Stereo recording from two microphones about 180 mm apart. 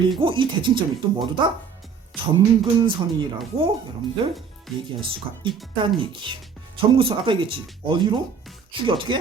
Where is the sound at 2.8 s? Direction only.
25° right (ahead or behind).